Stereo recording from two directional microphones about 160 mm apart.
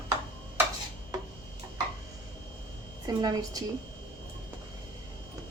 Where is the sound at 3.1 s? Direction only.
25° right (ahead or behind).